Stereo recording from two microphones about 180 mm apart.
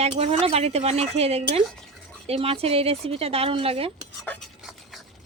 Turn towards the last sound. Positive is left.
turn(degrees=0)  # may be behind; listen again after turning